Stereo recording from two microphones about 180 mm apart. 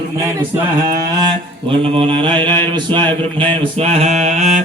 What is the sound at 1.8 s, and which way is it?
Mantra, 30° right (ahead or behind).